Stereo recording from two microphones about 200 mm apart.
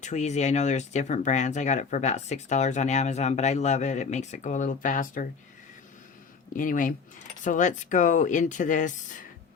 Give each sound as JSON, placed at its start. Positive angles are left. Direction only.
{"t": 0.0, "sound": "speech", "side_deg": 35}
{"t": 6.5, "sound": "speech", "side_deg": 40}